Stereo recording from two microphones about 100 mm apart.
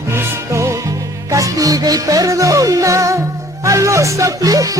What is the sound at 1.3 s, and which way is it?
Music, 35° right (ahead or behind).